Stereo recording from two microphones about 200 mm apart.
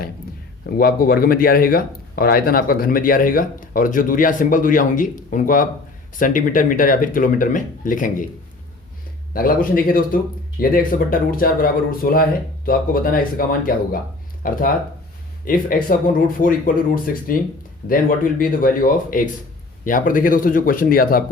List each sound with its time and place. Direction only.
0.7 s speech: 50° left (ahead or behind)
9.3 s speech: 45° left (ahead or behind)